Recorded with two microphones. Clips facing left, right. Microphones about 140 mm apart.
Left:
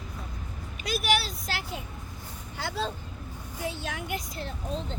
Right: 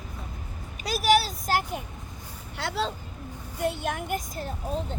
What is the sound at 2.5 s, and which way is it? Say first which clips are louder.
Vehicle: right 3 dB; 85° right.